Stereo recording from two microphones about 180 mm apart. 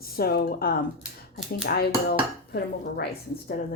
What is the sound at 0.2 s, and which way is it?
A woman's voice, 55° left (ahead or behind).